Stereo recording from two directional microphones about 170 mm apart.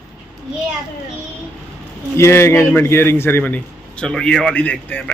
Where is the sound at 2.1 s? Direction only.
15° left (ahead or behind).